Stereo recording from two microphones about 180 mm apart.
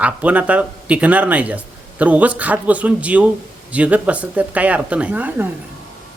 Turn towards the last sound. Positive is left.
turn(degrees=-10)  # may be behind; listen again after turning